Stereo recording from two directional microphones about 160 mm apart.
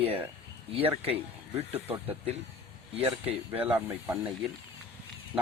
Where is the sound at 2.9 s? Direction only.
35° right (ahead or behind).